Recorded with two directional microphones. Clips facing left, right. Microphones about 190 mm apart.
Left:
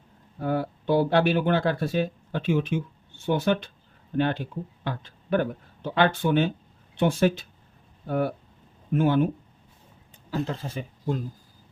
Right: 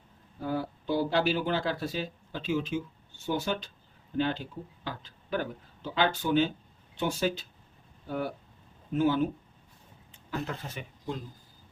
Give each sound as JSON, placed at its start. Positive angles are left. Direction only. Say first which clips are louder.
{"t": 0.3, "sound": "speech", "louder": "left 5 dB", "side_deg": 60}
{"t": 10.4, "sound": "speech", "louder": "left 5 dB", "side_deg": 30}